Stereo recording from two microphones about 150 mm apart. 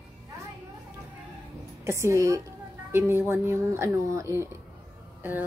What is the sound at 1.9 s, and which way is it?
A woman's voice, 20° right (ahead or behind).